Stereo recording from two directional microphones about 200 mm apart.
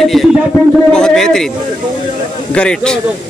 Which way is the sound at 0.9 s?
5° left (ahead or behind).